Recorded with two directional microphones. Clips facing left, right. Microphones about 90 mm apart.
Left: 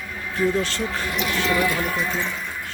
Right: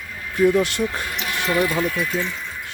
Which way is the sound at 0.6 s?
15° right (ahead or behind).